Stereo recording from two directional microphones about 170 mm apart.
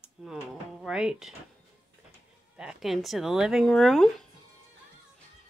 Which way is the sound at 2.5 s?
5° right (ahead or behind).